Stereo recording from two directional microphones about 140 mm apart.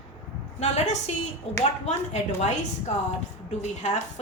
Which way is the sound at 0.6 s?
55° left (ahead or behind).